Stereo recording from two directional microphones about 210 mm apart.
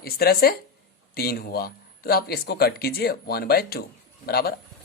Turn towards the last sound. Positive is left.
turn(degrees=45)  # may be behind; listen again after turning